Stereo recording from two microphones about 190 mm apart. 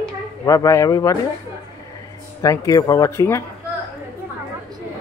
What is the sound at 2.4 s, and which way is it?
Speech, 15° left (ahead or behind).